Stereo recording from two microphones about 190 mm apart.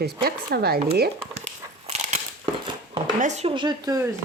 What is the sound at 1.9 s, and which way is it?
Crushing, 35° right (ahead or behind).